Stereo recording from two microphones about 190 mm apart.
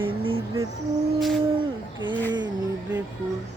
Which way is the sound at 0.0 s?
30° right (ahead or behind).